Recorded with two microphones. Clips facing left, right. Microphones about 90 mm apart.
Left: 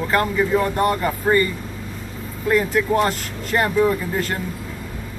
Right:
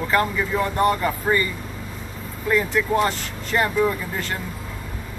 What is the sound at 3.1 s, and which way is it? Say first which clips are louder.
Speech: left 2 dB; 10° left (ahead or behind).